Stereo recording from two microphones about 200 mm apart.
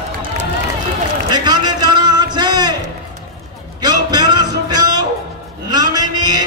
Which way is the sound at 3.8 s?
20° right (ahead or behind).